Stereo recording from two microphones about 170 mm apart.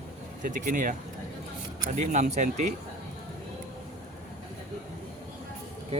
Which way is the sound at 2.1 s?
45° right (ahead or behind).